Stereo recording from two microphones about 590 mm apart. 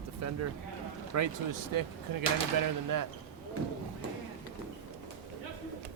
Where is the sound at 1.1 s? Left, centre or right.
Right.